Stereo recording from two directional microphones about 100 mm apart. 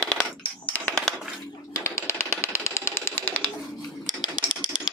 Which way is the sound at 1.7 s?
30° left (ahead or behind).